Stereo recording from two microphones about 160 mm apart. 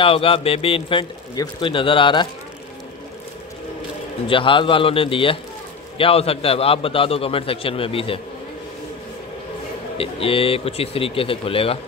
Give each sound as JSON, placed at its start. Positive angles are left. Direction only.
{"t": 0.0, "sound": "a man's voice", "side_deg": 35}
{"t": 4.3, "sound": "a man's voice", "side_deg": 30}
{"t": 9.9, "sound": "a man's voice", "side_deg": 35}